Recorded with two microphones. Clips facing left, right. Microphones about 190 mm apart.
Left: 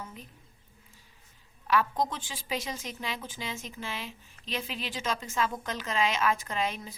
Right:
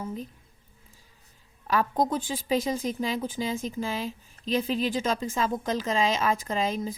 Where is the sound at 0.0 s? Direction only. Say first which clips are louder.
Right 10 dB; 35° right (ahead or behind).